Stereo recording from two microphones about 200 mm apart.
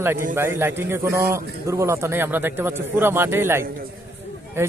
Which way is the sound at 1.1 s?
45° right (ahead or behind).